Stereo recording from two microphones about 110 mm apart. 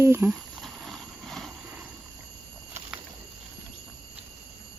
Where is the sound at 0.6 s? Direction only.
5° left (ahead or behind).